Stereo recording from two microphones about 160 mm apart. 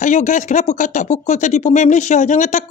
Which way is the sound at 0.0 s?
50° left (ahead or behind).